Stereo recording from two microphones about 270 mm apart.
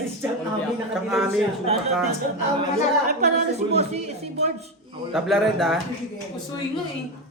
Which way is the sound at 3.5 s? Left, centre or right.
Right.